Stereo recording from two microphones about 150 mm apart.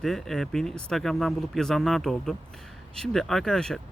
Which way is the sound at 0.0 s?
Centre (ahead or behind).